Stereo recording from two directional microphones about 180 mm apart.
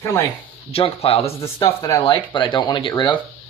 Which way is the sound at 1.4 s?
20° left (ahead or behind).